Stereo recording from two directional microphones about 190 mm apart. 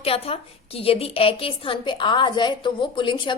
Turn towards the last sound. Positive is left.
turn(degrees=25)  # may be behind; listen again after turning